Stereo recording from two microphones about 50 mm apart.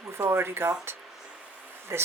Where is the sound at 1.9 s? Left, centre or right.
Right.